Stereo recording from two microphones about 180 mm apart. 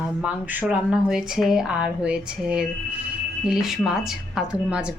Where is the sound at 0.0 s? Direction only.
5° right (ahead or behind).